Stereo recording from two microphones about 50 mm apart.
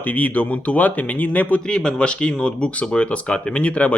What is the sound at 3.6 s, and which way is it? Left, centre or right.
Speech, left.